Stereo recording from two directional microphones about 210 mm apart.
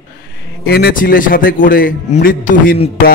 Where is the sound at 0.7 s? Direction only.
50° left (ahead or behind).